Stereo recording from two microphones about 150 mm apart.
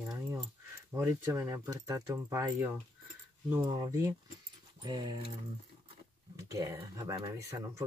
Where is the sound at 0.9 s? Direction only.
15° right (ahead or behind).